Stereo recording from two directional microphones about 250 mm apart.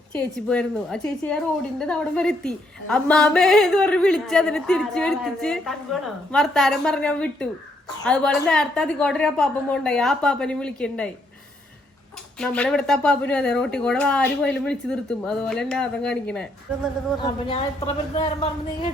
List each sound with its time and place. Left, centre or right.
0.1 s a woman's voice: centre
12.4 s a woman's voice: centre
17.2 s speech: centre